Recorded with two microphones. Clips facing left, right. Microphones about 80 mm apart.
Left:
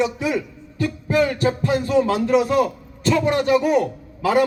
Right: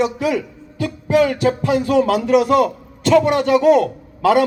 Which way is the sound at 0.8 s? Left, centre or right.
Right.